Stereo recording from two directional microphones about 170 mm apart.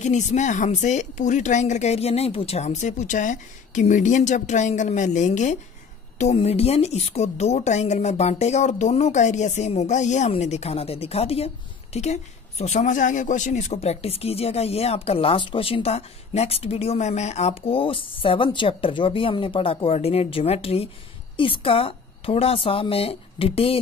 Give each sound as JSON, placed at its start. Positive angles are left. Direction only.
{"t": 0.0, "sound": "speech", "side_deg": 45}